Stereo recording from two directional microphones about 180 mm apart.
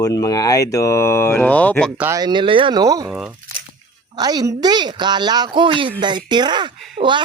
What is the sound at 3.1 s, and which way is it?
Snicker, centre (ahead or behind).